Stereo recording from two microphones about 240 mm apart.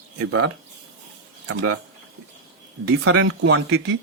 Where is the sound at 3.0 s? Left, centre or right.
Right.